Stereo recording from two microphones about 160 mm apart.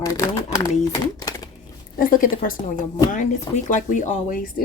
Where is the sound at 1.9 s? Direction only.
60° left (ahead or behind).